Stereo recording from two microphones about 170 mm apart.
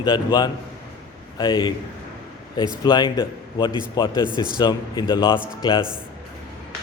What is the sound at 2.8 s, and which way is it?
A man's voice, 25° left (ahead or behind).